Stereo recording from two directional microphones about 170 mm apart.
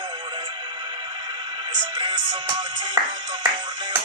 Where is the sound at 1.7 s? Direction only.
25° right (ahead or behind).